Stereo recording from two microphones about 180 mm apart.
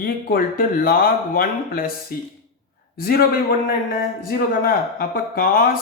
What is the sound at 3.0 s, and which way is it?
Speech, 55° left (ahead or behind).